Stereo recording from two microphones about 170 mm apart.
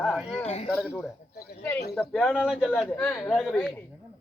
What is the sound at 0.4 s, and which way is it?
Speech, 40° left (ahead or behind).